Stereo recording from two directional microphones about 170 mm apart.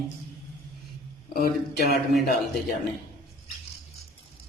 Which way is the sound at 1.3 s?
60° left (ahead or behind).